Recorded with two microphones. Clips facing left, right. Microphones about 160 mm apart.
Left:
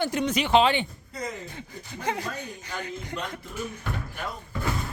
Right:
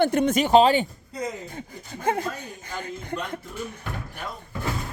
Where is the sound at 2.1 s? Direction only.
50° right (ahead or behind).